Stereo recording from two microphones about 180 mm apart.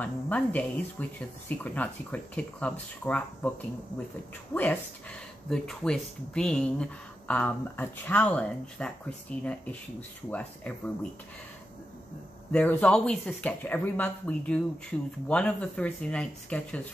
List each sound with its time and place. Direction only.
0.0 s speech: 10° left (ahead or behind)
5.5 s speech: 5° left (ahead or behind)
12.5 s speech: 10° left (ahead or behind)